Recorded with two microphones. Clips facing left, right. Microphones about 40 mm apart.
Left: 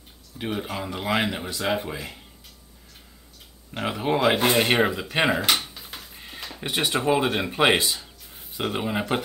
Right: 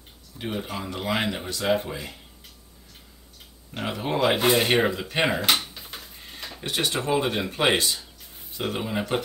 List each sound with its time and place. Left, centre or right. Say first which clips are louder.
0.4 s speech: left 2 dB; centre
3.7 s speech: left 3 dB; centre
5.8 s tick-tock: even; centre
6.6 s speech: left 3 dB; centre